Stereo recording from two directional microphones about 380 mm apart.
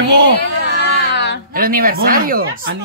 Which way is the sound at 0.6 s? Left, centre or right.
Left.